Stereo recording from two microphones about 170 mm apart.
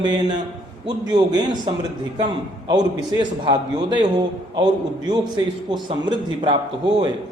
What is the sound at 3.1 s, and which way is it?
A man's voice, 25° right (ahead or behind).